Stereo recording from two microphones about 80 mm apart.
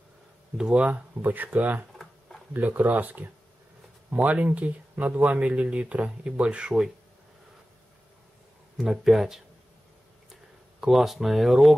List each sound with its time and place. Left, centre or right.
0.6 s speech: centre
2.0 s a sound: centre
2.5 s speech: right
8.7 s speech: centre
10.8 s speech: centre